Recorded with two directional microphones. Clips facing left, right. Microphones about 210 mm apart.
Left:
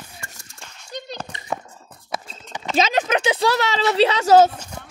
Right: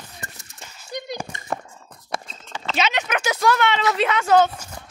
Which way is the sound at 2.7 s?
40° left (ahead or behind).